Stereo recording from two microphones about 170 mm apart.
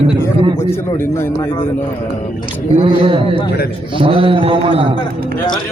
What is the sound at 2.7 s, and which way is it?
A man's voice, 30° right (ahead or behind).